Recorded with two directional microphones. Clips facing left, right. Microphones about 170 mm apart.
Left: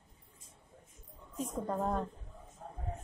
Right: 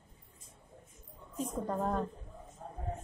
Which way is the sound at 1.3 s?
Centre (ahead or behind).